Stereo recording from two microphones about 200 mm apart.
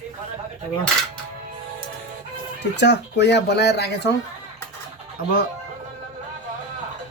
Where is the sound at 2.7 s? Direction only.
60° left (ahead or behind).